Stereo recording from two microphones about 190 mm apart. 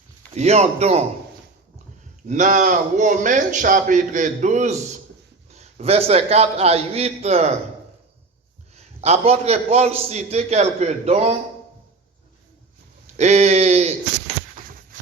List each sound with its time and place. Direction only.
0.3 s a man's voice: 35° right (ahead or behind)
2.2 s a man's voice: 40° right (ahead or behind)
8.7 s a man's voice: 35° right (ahead or behind)
13.1 s a sound: 35° right (ahead or behind)